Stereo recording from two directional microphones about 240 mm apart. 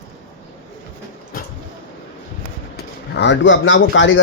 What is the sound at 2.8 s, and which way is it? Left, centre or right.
Speech, left.